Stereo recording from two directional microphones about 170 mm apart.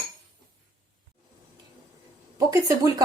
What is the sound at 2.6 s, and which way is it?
Speech, 15° right (ahead or behind).